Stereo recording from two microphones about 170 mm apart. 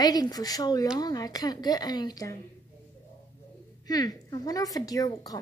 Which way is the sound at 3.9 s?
20° left (ahead or behind).